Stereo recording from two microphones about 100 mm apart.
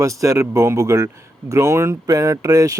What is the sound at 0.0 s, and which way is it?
Speech, 30° right (ahead or behind).